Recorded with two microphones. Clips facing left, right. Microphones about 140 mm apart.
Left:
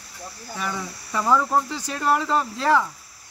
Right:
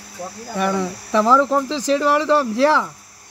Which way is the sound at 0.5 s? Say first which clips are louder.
Right 10 dB; 70° right (ahead or behind).